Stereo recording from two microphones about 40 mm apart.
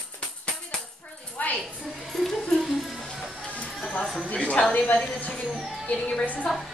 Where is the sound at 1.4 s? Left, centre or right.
Left.